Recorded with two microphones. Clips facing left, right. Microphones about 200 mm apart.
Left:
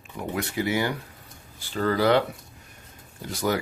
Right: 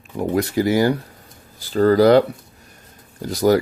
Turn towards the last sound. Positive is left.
turn(degrees=-40)  # may be behind; listen again after turning